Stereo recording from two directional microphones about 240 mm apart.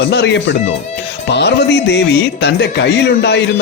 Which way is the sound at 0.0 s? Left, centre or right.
Left.